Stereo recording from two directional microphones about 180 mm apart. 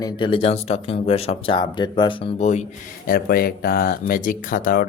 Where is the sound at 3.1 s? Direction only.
60° left (ahead or behind).